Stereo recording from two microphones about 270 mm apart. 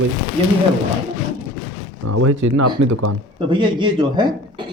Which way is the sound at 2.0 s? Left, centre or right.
Right.